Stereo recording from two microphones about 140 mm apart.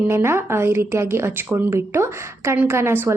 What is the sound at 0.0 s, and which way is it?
A woman's voice, 20° right (ahead or behind).